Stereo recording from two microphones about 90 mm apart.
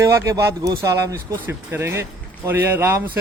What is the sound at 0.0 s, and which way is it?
A man's voice, 35° right (ahead or behind).